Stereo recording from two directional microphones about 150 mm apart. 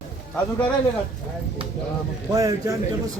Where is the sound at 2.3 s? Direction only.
25° right (ahead or behind).